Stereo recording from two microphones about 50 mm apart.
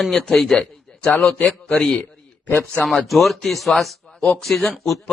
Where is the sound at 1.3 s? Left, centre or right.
Centre.